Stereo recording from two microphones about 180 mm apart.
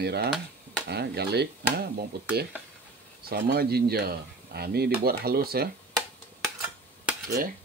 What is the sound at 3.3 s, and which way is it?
Speech, 60° right (ahead or behind).